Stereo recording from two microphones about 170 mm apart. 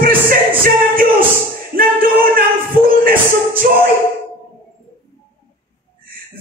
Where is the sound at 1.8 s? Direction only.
55° right (ahead or behind).